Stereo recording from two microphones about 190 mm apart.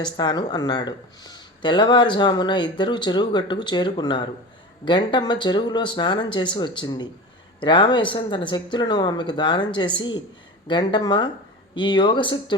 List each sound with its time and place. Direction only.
0.0 s speech: 20° left (ahead or behind)